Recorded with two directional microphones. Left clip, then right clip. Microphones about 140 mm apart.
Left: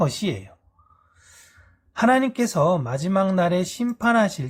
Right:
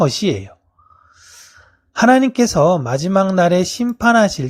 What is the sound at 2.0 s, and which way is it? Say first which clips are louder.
Speech: right 7 dB; 40° right (ahead or behind).